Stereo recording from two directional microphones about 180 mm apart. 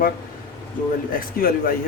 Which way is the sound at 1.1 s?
55° left (ahead or behind).